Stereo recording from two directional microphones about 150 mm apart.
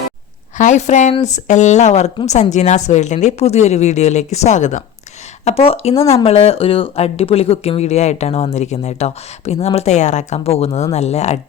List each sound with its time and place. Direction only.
0.5 s speech: 55° left (ahead or behind)
5.5 s speech: 40° left (ahead or behind)
6.0 s speech: 20° left (ahead or behind)
6.2 s speech: 40° left (ahead or behind)